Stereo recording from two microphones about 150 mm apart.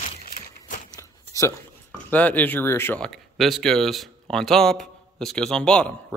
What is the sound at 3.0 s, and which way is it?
Speech, centre (ahead or behind).